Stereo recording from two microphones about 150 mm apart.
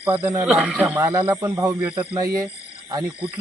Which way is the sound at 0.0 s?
10° right (ahead or behind).